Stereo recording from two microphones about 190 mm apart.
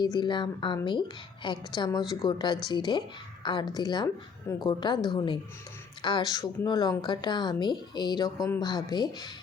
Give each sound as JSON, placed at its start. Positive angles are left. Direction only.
{"t": 0.0, "sound": "speech", "side_deg": 25}